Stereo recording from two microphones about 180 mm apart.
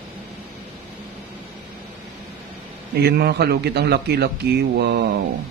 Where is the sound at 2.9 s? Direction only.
65° right (ahead or behind).